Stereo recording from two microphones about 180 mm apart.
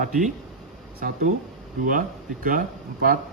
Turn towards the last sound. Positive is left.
turn(degrees=-50)  # may be behind; listen again after turning